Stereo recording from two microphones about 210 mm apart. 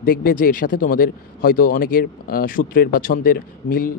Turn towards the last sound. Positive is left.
turn(degrees=45)  # may be behind; listen again after turning